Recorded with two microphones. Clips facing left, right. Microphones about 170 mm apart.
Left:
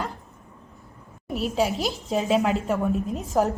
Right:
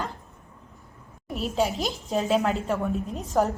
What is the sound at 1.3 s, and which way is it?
A woman's voice, centre (ahead or behind).